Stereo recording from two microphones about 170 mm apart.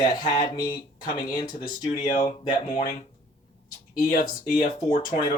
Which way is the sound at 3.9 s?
60° left (ahead or behind).